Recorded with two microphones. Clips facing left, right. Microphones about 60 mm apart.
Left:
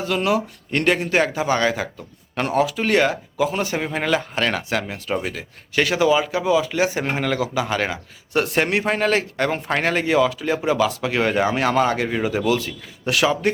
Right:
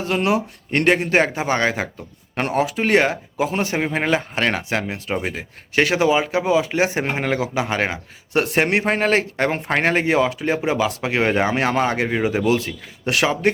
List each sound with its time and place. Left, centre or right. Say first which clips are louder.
0.0 s speech: right 1 dB; right